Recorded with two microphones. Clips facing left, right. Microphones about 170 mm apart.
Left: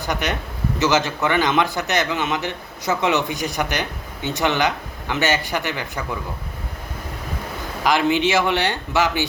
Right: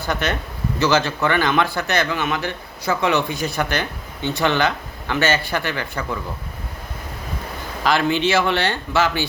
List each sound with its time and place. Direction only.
0.0 s a man's voice: 15° left (ahead or behind)
7.9 s a man's voice: 15° left (ahead or behind)